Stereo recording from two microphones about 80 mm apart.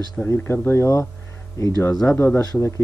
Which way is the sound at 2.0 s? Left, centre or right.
Left.